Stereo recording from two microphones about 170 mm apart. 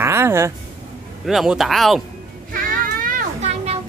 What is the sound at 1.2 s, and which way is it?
Speech, centre (ahead or behind).